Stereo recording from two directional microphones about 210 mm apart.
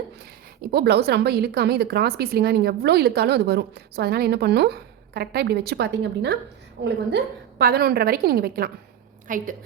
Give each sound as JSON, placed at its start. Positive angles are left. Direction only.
{"t": 0.7, "sound": "a woman's voice", "side_deg": -50}